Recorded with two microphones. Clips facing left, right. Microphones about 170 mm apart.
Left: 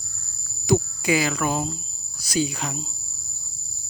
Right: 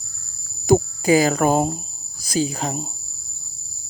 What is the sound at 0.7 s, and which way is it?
Cricket, 40° right (ahead or behind).